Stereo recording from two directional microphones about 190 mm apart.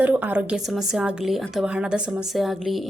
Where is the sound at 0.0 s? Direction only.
10° right (ahead or behind).